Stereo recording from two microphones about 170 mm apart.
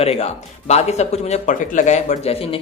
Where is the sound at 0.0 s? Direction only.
35° left (ahead or behind).